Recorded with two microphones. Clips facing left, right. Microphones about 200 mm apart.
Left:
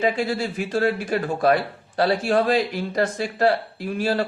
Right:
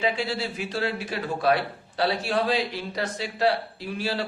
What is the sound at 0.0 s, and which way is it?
Speech, 45° left (ahead or behind).